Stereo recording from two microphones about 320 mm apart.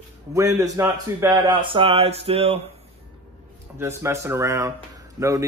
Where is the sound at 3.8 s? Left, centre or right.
Centre.